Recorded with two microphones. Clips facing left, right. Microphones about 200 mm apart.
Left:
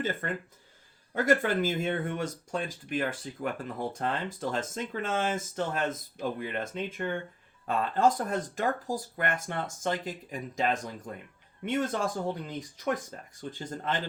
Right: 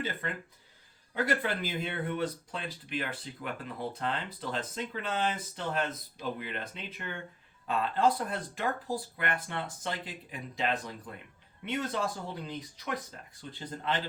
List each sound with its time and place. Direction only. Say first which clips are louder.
0.0 s speech: left 4 dB; 45° left (ahead or behind)